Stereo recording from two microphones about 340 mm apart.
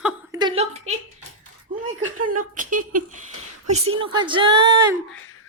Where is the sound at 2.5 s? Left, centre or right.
Right.